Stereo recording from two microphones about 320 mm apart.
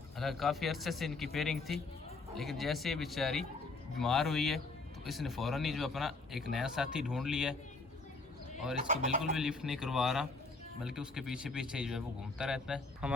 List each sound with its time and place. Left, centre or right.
0.2 s speech: centre
8.9 s speech: right
9.3 s speech: centre